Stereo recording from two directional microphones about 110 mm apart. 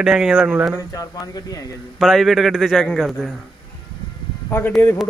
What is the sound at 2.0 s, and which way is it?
A man's voice, centre (ahead or behind).